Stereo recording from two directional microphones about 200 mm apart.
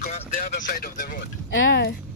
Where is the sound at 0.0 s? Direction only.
35° left (ahead or behind).